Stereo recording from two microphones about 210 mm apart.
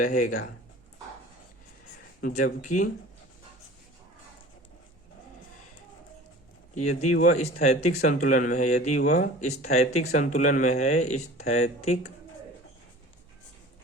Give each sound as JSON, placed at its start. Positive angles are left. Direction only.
{"t": 0.0, "sound": "speech", "side_deg": 40}
{"t": 2.2, "sound": "speech", "side_deg": 35}
{"t": 6.7, "sound": "speech", "side_deg": 35}